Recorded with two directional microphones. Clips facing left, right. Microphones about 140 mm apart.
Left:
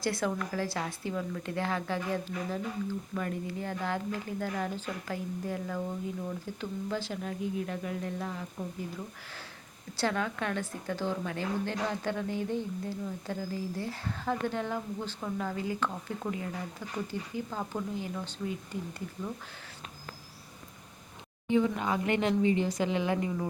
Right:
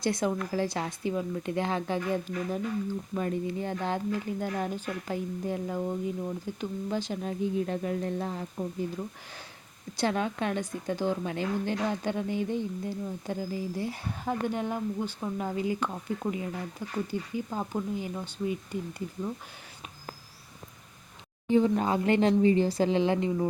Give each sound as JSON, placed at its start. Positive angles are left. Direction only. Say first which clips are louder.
{"t": 0.0, "sound": "speech", "louder": "right 3 dB", "side_deg": -20}
{"t": 10.0, "sound": "speech", "louder": "right 3 dB", "side_deg": -20}
{"t": 21.4, "sound": "speech", "louder": "right 4 dB", "side_deg": -35}